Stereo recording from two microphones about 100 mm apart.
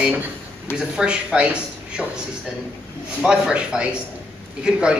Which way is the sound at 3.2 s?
10° right (ahead or behind).